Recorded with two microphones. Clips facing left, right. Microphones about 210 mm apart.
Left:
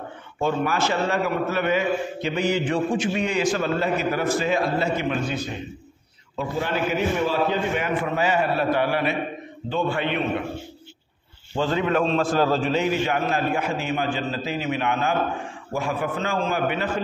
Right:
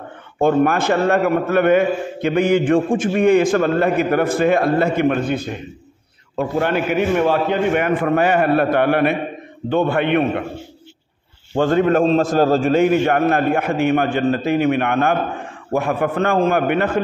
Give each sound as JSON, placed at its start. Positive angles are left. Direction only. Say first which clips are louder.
{"t": 0.4, "sound": "a man's voice", "louder": "right 8 dB", "side_deg": -55}
{"t": 11.5, "sound": "a man's voice", "louder": "right 7 dB", "side_deg": -50}